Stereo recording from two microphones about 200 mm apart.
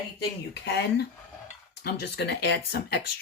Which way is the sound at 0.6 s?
55° left (ahead or behind).